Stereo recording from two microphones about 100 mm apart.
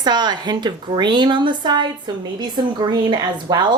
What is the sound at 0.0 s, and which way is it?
Speech, 45° right (ahead or behind).